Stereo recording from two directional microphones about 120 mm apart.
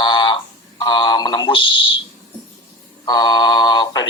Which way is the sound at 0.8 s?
35° left (ahead or behind).